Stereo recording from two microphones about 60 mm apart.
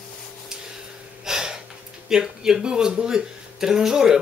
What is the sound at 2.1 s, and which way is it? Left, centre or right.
Speech, centre.